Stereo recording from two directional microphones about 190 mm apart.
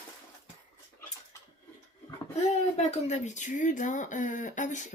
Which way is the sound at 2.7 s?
35° left (ahead or behind).